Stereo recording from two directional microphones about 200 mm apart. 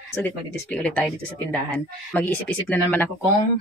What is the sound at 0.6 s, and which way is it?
Speech, 5° left (ahead or behind).